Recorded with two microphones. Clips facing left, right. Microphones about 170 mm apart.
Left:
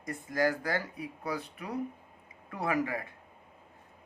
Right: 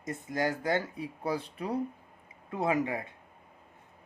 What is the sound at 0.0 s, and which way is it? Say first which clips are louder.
Speech: left 2 dB; 25° right (ahead or behind).